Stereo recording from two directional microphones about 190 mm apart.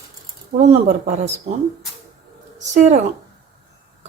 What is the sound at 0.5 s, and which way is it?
A woman's voice, 40° right (ahead or behind).